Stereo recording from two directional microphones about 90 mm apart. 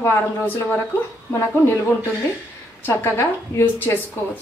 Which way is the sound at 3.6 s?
30° left (ahead or behind).